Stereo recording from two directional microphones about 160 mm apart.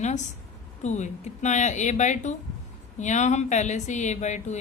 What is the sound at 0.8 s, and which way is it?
Speech, 45° left (ahead or behind).